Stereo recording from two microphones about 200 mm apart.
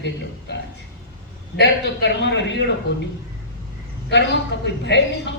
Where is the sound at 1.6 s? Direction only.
60° left (ahead or behind).